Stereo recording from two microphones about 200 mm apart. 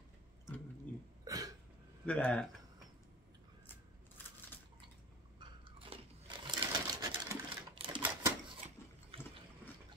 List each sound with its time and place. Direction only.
1.2 s cough: 15° right (ahead or behind)
2.0 s speech: 5° left (ahead or behind)
5.4 s sewing machine: 25° right (ahead or behind)